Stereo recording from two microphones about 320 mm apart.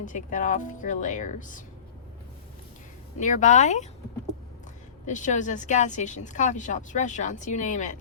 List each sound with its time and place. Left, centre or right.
0.0 s speech: left
3.2 s speech: left
5.0 s speech: left